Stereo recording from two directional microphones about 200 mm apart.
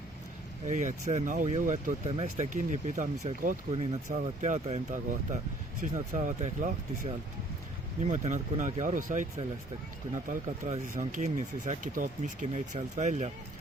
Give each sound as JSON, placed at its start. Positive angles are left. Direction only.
{"t": 0.7, "sound": "speech", "side_deg": -40}
{"t": 10.2, "sound": "speech", "side_deg": -40}